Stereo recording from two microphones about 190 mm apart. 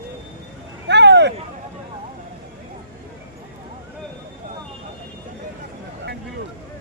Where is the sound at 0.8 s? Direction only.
65° right (ahead or behind).